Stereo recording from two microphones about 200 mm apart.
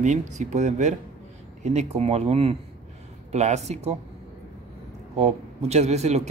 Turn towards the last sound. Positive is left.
turn(degrees=-35)  # may be behind; listen again after turning